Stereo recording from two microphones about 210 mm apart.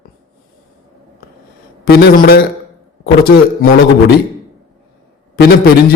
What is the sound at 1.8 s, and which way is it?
Speech, 50° left (ahead or behind).